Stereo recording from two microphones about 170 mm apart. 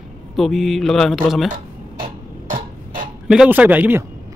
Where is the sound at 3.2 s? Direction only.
5° right (ahead or behind).